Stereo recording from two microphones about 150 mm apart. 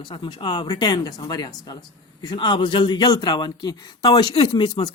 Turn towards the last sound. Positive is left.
turn(degrees=30)  # may be behind; listen again after turning